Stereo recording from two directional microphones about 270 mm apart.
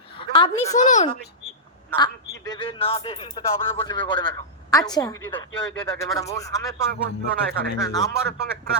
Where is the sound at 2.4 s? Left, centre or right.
Centre.